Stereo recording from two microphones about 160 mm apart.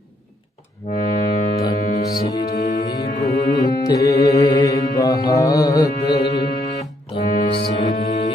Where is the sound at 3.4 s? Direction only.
25° left (ahead or behind).